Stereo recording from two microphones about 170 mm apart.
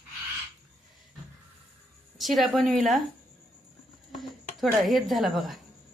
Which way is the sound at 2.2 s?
Centre (ahead or behind).